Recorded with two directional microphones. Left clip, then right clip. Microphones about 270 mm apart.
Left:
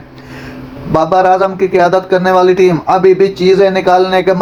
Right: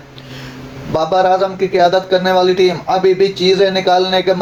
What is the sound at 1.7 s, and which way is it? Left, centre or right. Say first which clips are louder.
A man's voice: left 1 dB; left.